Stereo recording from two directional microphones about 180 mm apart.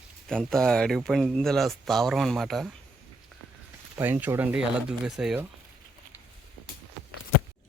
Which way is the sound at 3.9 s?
10° right (ahead or behind).